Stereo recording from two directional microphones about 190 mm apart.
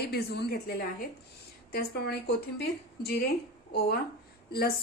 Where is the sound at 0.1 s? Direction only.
55° left (ahead or behind).